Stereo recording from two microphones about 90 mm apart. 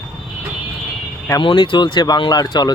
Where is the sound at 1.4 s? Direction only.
65° left (ahead or behind); by 2.7 s 45° left (ahead or behind).